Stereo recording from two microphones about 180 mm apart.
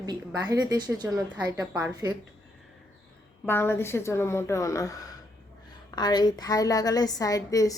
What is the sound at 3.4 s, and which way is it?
A woman's voice, 10° left (ahead or behind).